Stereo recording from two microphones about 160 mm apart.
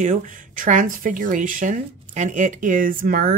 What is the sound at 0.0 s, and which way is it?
Speech, 50° right (ahead or behind).